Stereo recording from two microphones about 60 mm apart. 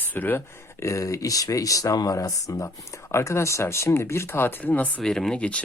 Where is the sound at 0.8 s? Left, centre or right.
Left.